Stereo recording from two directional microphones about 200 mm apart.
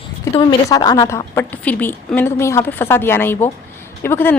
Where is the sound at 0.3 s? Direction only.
20° left (ahead or behind).